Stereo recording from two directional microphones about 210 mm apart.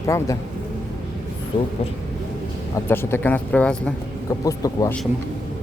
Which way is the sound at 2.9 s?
10° left (ahead or behind).